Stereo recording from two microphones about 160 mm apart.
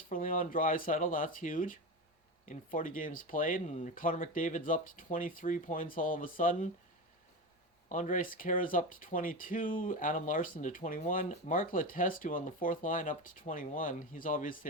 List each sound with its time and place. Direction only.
0.1 s speech: 55° left (ahead or behind)
7.9 s speech: 55° left (ahead or behind)